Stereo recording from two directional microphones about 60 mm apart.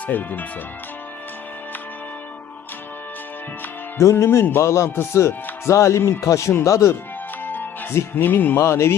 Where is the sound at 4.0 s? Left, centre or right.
Left.